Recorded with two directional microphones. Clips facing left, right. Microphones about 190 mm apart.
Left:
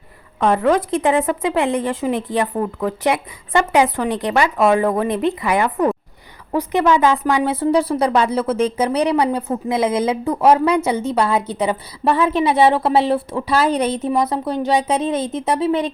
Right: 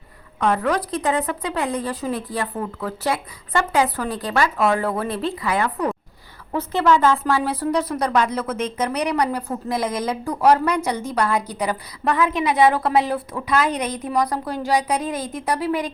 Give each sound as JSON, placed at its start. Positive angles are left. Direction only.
{"t": 0.3, "sound": "a woman's voice", "side_deg": 25}